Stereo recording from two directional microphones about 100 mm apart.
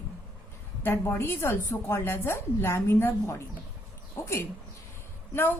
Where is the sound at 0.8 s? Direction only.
20° left (ahead or behind).